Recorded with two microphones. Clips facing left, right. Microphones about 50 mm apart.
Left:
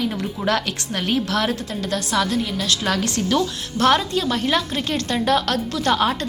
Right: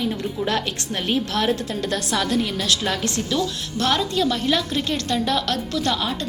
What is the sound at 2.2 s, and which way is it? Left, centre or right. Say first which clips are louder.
Speech: right 1 dB; right.